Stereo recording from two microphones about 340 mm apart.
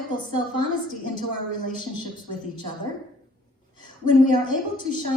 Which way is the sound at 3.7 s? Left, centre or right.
Right.